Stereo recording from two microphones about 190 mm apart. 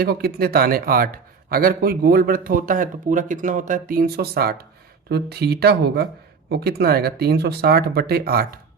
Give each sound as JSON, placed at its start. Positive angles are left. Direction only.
{"t": 0.0, "sound": "a man's voice", "side_deg": -55}